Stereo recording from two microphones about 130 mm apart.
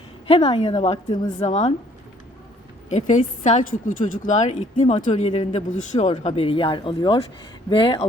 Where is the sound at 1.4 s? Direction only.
65° left (ahead or behind).